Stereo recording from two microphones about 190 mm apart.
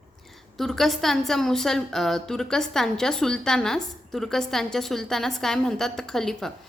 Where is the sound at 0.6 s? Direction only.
Centre (ahead or behind).